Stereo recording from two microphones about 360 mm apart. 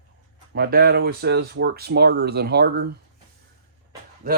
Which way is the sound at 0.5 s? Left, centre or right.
Right.